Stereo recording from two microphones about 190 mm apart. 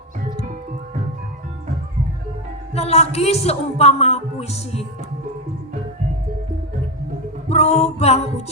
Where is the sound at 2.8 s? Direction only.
35° left (ahead or behind).